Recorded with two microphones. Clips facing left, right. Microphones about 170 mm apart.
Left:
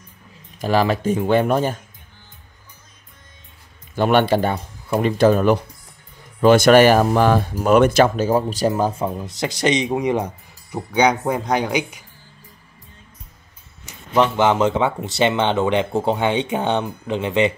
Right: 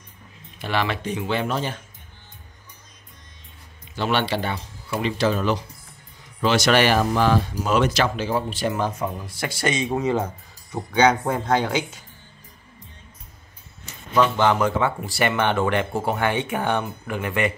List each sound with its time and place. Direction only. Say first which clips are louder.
0.6 s speech: left 7 dB; 40° left (ahead or behind)
3.9 s speech: left 7 dB; 50° left (ahead or behind); by 12.0 s 15° left (ahead or behind)
13.8 s speech: left 2 dB; 20° left (ahead or behind)